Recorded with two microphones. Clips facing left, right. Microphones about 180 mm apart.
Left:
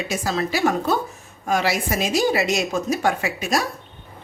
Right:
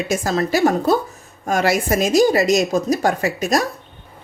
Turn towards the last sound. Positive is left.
turn(degrees=-40)  # may be behind; listen again after turning